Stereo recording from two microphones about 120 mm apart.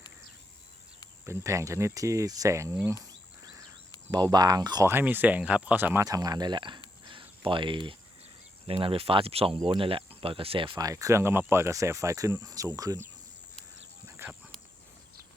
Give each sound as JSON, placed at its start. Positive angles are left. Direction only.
{"t": 1.2, "sound": "speech", "side_deg": -25}
{"t": 4.1, "sound": "speech", "side_deg": -35}
{"t": 4.9, "sound": "speech", "side_deg": -15}
{"t": 6.1, "sound": "speech", "side_deg": -30}
{"t": 7.0, "sound": "cricket", "side_deg": -45}
{"t": 8.6, "sound": "speech", "side_deg": -50}
{"t": 10.8, "sound": "speech", "side_deg": -30}